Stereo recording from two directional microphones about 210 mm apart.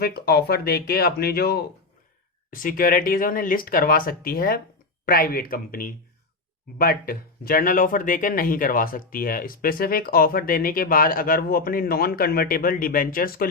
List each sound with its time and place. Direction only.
0.0 s speech: 50° left (ahead or behind)